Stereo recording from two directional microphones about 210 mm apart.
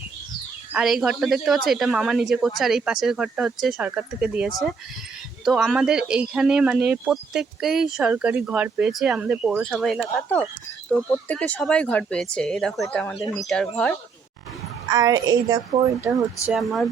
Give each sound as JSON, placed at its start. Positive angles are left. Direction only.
{"t": 0.7, "sound": "speech", "side_deg": 0}
{"t": 14.8, "sound": "a woman's voice", "side_deg": -15}
{"t": 16.5, "sound": "speech", "side_deg": 0}